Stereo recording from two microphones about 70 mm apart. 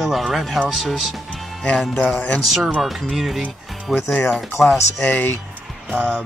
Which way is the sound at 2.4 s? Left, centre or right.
Centre.